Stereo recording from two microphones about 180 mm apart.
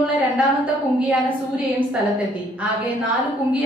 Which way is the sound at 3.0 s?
10° right (ahead or behind).